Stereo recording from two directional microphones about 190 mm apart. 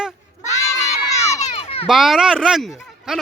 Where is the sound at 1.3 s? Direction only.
30° left (ahead or behind).